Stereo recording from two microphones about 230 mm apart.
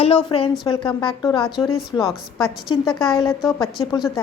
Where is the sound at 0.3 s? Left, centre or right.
Left.